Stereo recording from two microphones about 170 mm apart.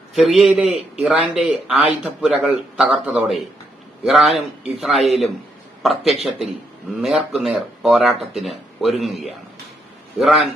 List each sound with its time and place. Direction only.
0.1 s speech: centre (ahead or behind)